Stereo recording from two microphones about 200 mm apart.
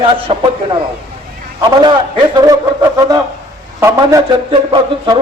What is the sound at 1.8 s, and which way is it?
Speech, 20° right (ahead or behind).